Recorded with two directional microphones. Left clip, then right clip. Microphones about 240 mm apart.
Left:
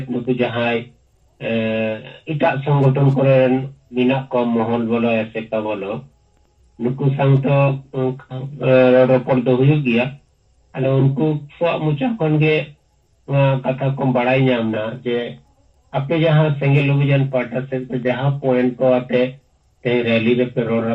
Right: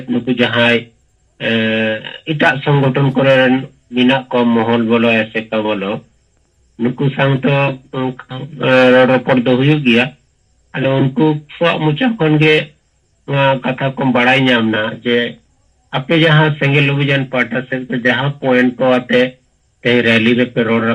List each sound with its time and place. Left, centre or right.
0.1 s speech: right